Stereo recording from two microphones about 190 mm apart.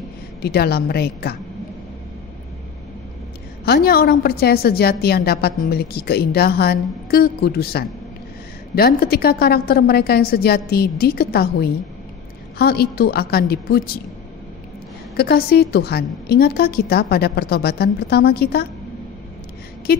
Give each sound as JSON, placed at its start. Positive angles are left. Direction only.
{"t": 0.4, "sound": "a woman's voice", "side_deg": 55}
{"t": 3.6, "sound": "a woman's voice", "side_deg": 55}
{"t": 15.1, "sound": "a woman's voice", "side_deg": 55}
{"t": 19.9, "sound": "a sound", "side_deg": 55}